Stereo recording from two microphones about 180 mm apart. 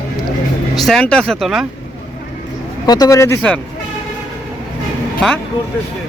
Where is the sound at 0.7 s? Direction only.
Centre (ahead or behind).